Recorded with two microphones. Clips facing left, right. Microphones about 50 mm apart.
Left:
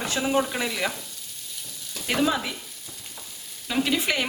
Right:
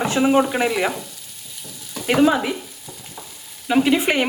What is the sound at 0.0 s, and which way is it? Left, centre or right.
Frying, right.